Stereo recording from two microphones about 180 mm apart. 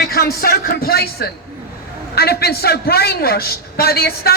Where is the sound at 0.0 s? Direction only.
60° left (ahead or behind).